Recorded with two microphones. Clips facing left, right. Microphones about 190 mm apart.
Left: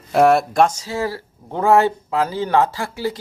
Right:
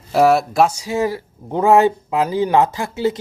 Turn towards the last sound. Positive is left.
turn(degrees=-20)  # may be behind; listen again after turning